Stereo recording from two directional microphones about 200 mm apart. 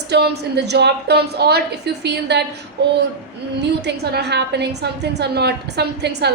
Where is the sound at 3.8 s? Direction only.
55° right (ahead or behind).